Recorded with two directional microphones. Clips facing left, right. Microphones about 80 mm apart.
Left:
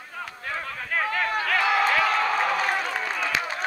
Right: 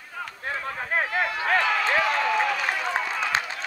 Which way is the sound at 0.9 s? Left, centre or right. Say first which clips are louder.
Left 1 dB; right.